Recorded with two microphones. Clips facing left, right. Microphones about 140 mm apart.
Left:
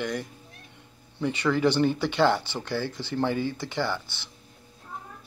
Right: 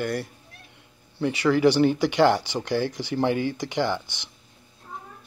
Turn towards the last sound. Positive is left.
turn(degrees=-15)  # may be behind; listen again after turning